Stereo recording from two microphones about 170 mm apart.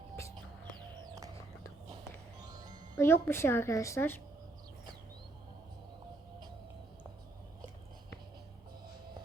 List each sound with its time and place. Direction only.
0.9 s bird: 20° right (ahead or behind)
2.4 s music: 25° right (ahead or behind)
3.0 s speech: 15° left (ahead or behind)